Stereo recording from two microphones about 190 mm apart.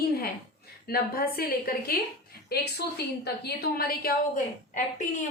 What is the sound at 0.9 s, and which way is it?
A woman's voice, 50° left (ahead or behind).